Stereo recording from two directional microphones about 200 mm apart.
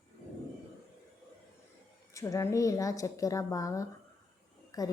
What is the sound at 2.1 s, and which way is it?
A woman's voice, 15° left (ahead or behind).